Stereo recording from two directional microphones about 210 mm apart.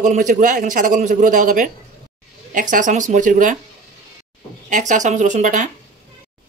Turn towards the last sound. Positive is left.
turn(degrees=-35)  # may be behind; listen again after turning